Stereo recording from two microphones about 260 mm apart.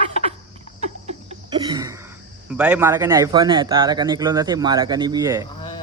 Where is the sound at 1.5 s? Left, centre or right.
Centre.